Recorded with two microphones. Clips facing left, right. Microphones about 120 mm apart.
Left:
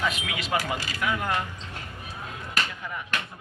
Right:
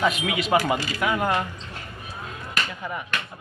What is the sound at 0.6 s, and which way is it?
Speech, 55° right (ahead or behind).